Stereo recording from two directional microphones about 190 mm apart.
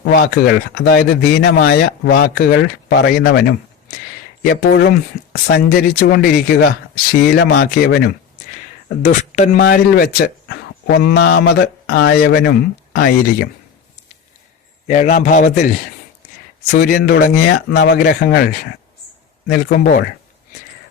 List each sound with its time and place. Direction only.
0.0 s speech: 55° left (ahead or behind)
4.7 s speech: 55° left (ahead or behind)
9.0 s speech: 40° left (ahead or behind)
14.8 s speech: 40° left (ahead or behind)
16.7 s speech: 50° left (ahead or behind)